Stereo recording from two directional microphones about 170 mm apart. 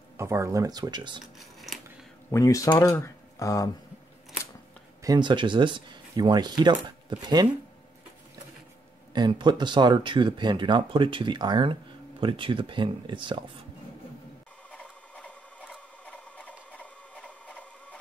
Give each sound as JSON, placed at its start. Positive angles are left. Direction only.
{"t": 0.2, "sound": "speech", "side_deg": -15}
{"t": 1.2, "sound": "a sound", "side_deg": 0}
{"t": 2.3, "sound": "speech", "side_deg": 20}
{"t": 5.0, "sound": "speech", "side_deg": -25}
{"t": 9.1, "sound": "speech", "side_deg": -25}
{"t": 14.7, "sound": "sewing machine", "side_deg": 5}